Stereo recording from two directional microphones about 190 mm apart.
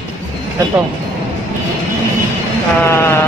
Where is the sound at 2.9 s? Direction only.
15° left (ahead or behind).